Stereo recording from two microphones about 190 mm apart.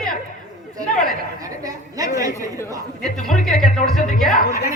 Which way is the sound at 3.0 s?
Centre (ahead or behind).